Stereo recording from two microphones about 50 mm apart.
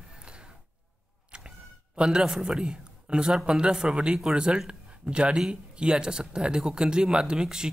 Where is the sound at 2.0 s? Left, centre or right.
Centre.